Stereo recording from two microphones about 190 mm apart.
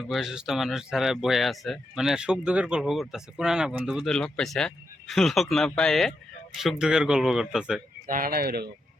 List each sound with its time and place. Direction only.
0.1 s speech: centre (ahead or behind)
8.0 s speech: 45° right (ahead or behind)